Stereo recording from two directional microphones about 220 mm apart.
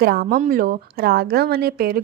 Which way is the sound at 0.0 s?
45° right (ahead or behind).